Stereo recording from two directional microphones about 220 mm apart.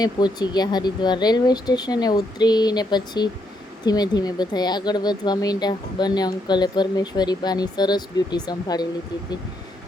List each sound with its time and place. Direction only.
0.0 s speech: 20° left (ahead or behind)